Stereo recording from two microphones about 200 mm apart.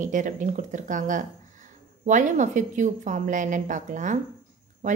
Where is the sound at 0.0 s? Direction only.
40° right (ahead or behind).